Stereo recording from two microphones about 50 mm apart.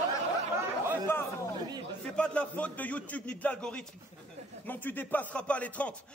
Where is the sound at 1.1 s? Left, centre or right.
Left.